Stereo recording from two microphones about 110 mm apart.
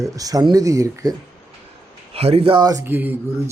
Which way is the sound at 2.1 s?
65° right (ahead or behind).